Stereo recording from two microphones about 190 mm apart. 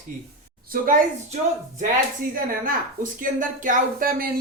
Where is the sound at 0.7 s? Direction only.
45° right (ahead or behind).